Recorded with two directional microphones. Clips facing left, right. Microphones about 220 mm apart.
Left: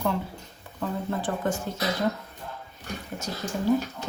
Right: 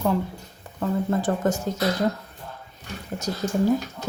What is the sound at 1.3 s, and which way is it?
Speech, 45° right (ahead or behind).